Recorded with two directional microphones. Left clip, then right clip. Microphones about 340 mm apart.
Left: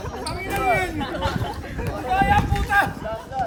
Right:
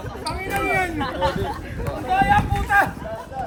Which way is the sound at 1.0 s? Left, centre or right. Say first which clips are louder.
Right 3 dB; centre.